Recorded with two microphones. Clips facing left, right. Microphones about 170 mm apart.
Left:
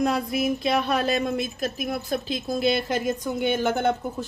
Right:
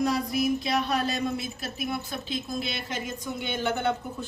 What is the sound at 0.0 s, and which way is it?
A woman's voice, 55° left (ahead or behind).